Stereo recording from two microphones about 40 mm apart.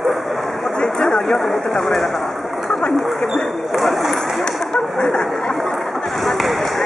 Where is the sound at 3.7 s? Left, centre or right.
Centre.